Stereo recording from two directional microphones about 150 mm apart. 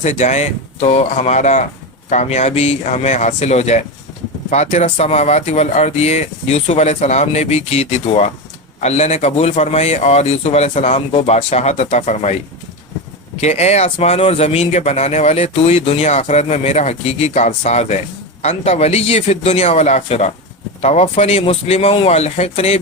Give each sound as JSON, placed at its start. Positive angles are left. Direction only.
{"t": 0.0, "sound": "speech", "side_deg": 50}
{"t": 13.4, "sound": "speech", "side_deg": 45}